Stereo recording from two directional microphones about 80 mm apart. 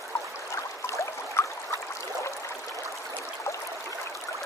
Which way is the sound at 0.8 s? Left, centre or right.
Left.